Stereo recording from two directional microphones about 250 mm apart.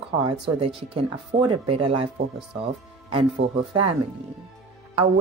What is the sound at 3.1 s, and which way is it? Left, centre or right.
Speech, right.